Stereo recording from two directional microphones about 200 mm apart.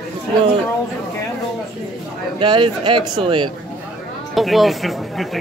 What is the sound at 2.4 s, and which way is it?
Speech, 25° right (ahead or behind).